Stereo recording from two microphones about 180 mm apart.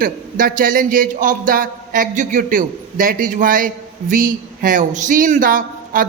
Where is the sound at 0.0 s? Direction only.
50° right (ahead or behind).